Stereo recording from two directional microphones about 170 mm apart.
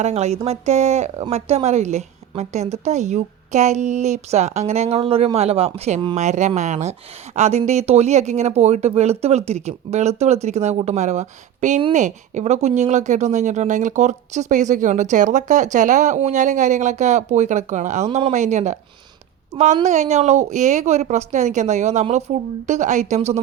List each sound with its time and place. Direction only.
0.0 s speech: 40° right (ahead or behind)